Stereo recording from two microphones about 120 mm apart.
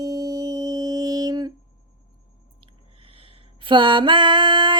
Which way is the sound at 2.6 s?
50° right (ahead or behind).